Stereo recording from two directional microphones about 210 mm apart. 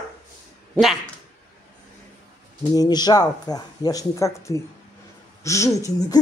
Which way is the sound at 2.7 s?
20° left (ahead or behind).